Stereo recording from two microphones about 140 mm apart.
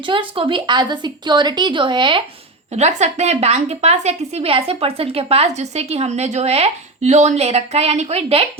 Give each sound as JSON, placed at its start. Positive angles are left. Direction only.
{"t": 0.0, "sound": "a woman's voice", "side_deg": -35}
{"t": 2.7, "sound": "a woman's voice", "side_deg": -50}